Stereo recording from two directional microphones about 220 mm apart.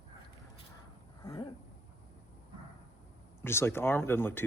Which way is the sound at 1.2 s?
15° left (ahead or behind).